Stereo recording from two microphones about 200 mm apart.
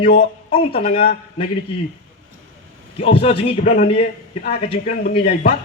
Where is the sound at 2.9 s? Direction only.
30° left (ahead or behind).